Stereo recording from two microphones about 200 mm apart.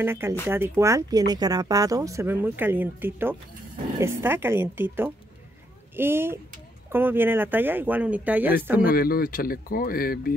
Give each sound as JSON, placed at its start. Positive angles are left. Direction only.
{"t": 0.0, "sound": "speech", "side_deg": -10}
{"t": 8.8, "sound": "speech", "side_deg": 50}